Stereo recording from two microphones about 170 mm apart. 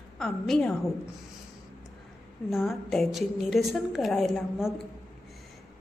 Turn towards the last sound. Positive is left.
turn(degrees=0)  # may be behind; listen again after turning